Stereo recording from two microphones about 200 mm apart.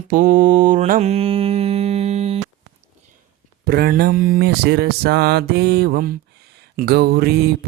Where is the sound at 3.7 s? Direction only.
50° right (ahead or behind).